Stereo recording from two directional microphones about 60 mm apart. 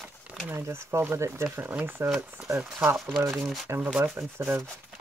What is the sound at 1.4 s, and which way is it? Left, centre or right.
Speech, right.